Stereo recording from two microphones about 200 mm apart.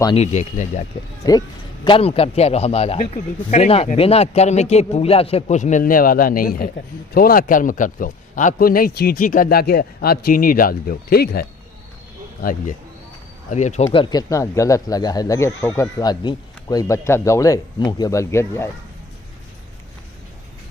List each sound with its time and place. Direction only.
0.2 s a man's voice: 35° left (ahead or behind)
1.2 s a man's voice: 20° left (ahead or behind)